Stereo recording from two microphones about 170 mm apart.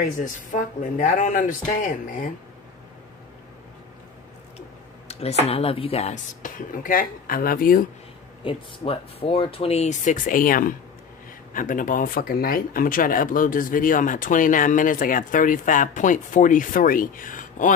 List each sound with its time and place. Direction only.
0.0 s speech: 45° left (ahead or behind)
5.4 s speech: 35° left (ahead or behind)
6.4 s speech: 55° left (ahead or behind)
8.5 s speech: 35° left (ahead or behind); by 17.7 s 50° left (ahead or behind)